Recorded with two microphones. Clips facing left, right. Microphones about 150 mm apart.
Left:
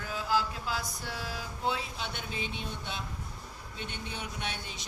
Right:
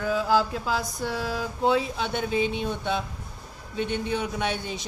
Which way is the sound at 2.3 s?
65° right (ahead or behind).